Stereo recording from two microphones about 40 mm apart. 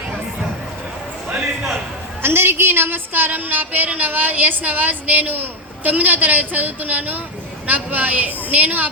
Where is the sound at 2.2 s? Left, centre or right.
Right.